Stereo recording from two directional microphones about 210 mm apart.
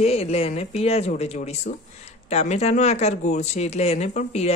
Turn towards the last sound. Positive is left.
turn(degrees=30)  # may be behind; listen again after turning